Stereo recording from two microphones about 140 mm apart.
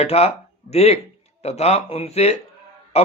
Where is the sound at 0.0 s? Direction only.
45° left (ahead or behind).